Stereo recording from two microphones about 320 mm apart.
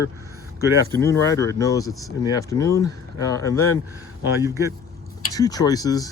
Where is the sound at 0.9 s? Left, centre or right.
Centre.